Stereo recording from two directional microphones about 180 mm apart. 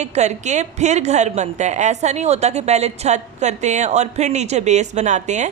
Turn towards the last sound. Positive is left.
turn(degrees=-40)  # may be behind; listen again after turning